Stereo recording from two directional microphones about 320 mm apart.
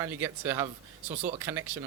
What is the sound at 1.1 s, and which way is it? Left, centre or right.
Speech, right.